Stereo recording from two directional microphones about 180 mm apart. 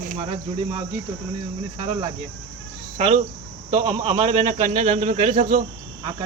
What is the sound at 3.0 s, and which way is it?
Speech, 40° right (ahead or behind).